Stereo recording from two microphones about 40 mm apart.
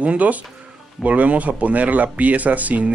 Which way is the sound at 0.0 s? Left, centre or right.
Right.